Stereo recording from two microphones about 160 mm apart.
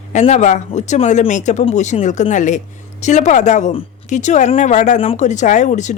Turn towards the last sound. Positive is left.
turn(degrees=50)  # may be behind; listen again after turning